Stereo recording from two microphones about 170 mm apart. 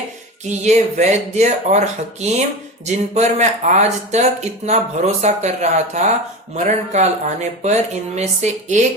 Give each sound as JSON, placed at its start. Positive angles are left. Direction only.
{"t": 0.6, "sound": "speech", "side_deg": -40}